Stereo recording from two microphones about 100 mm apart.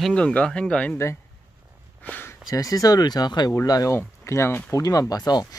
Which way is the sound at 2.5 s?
35° left (ahead or behind).